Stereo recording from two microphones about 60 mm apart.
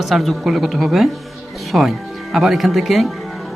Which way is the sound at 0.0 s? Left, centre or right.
Centre.